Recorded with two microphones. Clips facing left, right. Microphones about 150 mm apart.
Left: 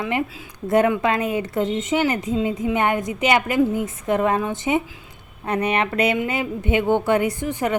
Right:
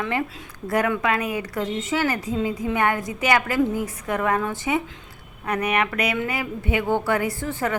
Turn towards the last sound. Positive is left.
turn(degrees=20)  # may be behind; listen again after turning